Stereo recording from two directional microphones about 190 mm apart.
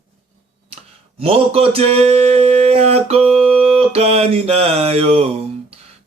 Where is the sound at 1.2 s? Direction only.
30° right (ahead or behind).